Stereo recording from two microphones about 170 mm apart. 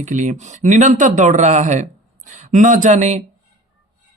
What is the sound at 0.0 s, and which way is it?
Speech, 45° right (ahead or behind).